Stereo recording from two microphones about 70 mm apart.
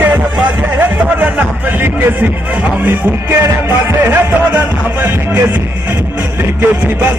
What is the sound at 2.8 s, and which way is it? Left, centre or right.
Music, right.